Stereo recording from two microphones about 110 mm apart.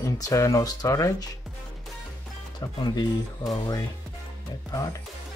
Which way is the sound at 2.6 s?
40° left (ahead or behind).